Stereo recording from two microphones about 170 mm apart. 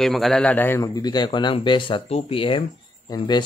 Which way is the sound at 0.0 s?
Centre (ahead or behind).